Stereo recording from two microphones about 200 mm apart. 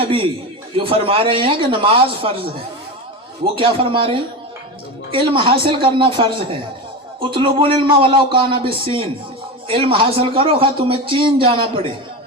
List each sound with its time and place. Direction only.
0.0 s a man's voice: 25° right (ahead or behind)